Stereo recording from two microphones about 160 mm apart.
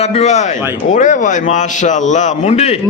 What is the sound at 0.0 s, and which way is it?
A man's voice, 40° left (ahead or behind).